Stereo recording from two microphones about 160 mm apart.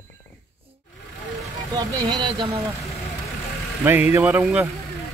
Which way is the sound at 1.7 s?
25° right (ahead or behind).